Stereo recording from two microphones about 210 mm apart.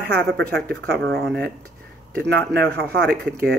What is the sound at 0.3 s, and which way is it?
Speech, 5° left (ahead or behind).